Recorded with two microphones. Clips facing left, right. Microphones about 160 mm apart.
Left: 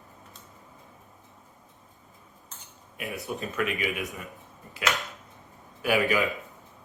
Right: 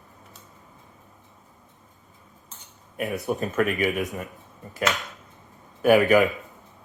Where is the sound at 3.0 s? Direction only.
40° right (ahead or behind).